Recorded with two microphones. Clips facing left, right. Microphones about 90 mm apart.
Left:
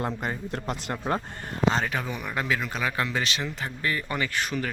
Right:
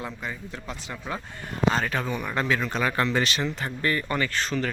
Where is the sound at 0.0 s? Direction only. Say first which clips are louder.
Left 4 dB; 50° left (ahead or behind).